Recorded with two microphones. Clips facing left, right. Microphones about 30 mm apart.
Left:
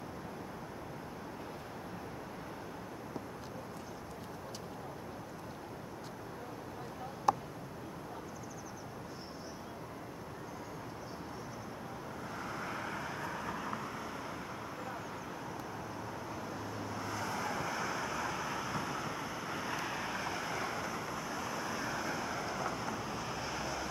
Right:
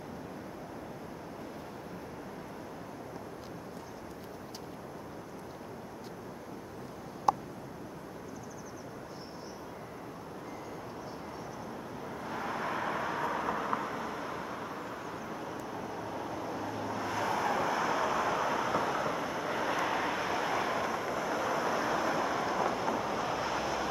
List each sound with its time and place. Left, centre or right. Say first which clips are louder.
12.3 s vehicle: right 7 dB; right; by 15.3 s centre
16.3 s vehicle: right 5 dB; centre